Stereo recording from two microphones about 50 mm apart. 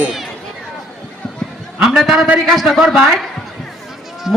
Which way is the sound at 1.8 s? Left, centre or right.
Centre.